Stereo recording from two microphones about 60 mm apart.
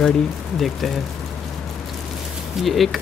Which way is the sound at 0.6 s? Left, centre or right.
Centre.